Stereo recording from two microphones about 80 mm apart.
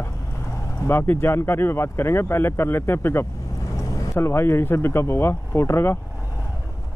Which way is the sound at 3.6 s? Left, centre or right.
Left.